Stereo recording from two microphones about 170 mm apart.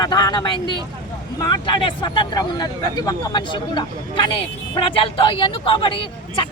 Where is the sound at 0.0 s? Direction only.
25° left (ahead or behind).